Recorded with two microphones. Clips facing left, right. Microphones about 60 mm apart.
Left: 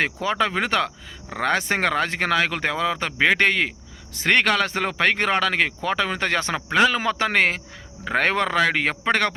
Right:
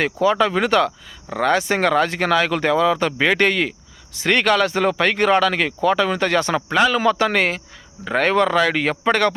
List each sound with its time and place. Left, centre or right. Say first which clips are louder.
0.0 s speech: right 5 dB; left
4.1 s speech: right 2 dB; left